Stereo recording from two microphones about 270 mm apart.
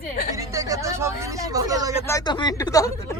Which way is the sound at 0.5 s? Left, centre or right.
Centre.